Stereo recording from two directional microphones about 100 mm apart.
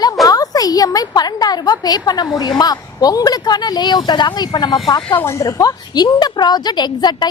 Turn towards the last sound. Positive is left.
turn(degrees=45)  # may be behind; listen again after turning